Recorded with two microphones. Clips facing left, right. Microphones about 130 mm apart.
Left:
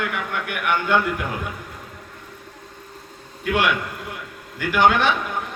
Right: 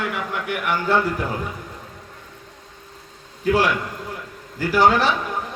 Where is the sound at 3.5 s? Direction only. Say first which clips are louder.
Right 2 dB; 35° right (ahead or behind).